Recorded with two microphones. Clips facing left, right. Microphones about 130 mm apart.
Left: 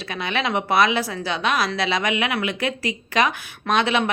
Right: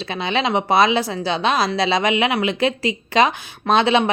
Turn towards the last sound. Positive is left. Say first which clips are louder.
# right 4 dB
turn(degrees=-25)  # may be behind; listen again after turning